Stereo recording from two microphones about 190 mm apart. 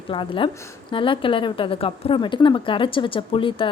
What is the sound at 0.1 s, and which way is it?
A woman's voice, 25° left (ahead or behind).